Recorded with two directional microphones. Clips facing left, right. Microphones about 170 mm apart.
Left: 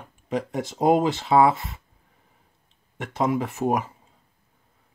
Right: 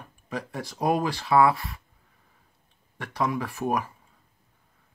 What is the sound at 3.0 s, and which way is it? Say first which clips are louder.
Speech: left 4 dB; 20° left (ahead or behind).